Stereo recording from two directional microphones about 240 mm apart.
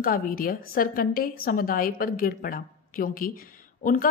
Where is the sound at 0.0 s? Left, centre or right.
Left.